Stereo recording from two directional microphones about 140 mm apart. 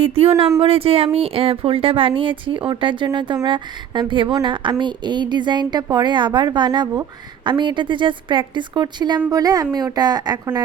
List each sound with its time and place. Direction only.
0.2 s a woman's voice: 45° right (ahead or behind); by 10.6 s 25° right (ahead or behind)